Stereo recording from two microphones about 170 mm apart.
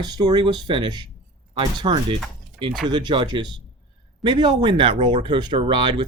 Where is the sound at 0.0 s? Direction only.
25° right (ahead or behind).